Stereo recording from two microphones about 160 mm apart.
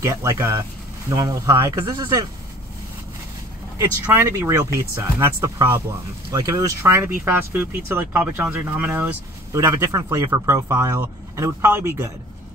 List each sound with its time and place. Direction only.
0.0 s speech: 20° right (ahead or behind)
3.7 s speech: 20° right (ahead or behind)